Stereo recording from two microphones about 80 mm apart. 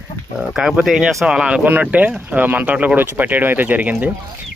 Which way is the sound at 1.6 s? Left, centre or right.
Right.